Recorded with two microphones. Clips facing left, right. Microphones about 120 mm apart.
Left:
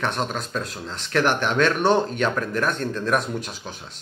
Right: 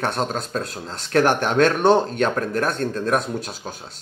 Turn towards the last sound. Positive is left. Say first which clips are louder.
# right 2 dB
turn(degrees=-40)  # may be behind; listen again after turning